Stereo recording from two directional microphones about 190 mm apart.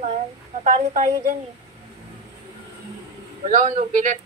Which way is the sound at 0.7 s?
40° right (ahead or behind).